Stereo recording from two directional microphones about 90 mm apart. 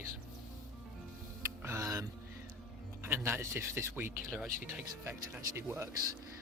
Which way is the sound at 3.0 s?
25° right (ahead or behind).